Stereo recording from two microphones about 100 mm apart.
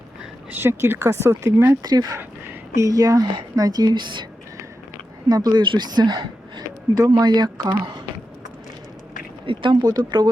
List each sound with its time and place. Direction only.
0.2 s speech: 20° right (ahead or behind)
1.8 s speech: 40° right (ahead or behind)
5.3 s speech: 40° right (ahead or behind)
7.2 s speech: 45° right (ahead or behind)
9.5 s speech: 60° right (ahead or behind)
9.8 s speech: 45° right (ahead or behind)